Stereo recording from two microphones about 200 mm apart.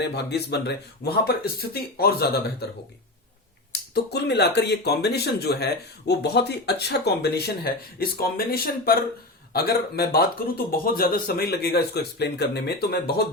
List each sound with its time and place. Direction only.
0.0 s speech: 55° left (ahead or behind)
3.7 s speech: 55° left (ahead or behind)